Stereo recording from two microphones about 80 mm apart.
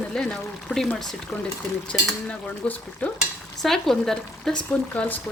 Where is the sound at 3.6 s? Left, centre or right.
Centre.